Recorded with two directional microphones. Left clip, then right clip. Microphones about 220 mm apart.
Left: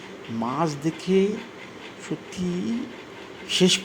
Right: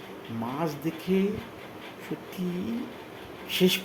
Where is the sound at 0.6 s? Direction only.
15° left (ahead or behind).